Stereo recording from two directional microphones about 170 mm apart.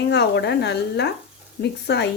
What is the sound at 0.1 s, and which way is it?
Speech, 85° left.